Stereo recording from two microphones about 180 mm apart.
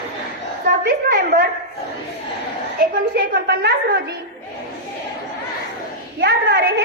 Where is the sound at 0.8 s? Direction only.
60° right (ahead or behind).